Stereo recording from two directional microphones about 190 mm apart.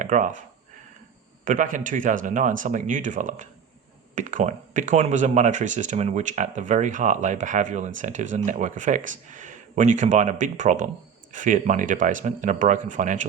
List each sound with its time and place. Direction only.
0.0 s speech: 40° right (ahead or behind)
1.5 s speech: 45° right (ahead or behind)